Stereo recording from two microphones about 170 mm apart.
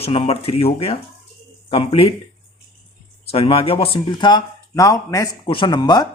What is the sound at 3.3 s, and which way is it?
Speech, 35° left (ahead or behind).